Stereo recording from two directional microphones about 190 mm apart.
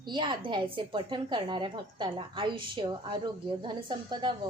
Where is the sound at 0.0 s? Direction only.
25° right (ahead or behind).